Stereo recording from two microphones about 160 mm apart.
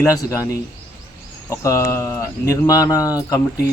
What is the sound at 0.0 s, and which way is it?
Speech, 20° left (ahead or behind).